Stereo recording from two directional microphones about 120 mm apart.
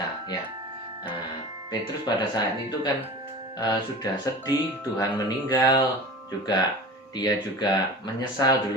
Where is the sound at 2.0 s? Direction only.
35° left (ahead or behind).